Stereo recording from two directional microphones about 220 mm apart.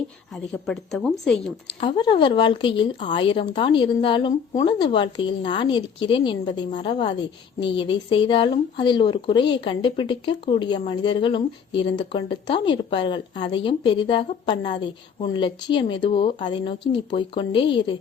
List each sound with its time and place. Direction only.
0.3 s a woman's voice: centre (ahead or behind)
1.8 s speech: 20° left (ahead or behind)